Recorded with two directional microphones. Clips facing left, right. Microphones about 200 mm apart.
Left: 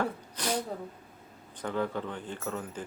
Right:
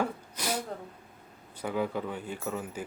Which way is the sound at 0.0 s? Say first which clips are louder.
Even; 10° right (ahead or behind).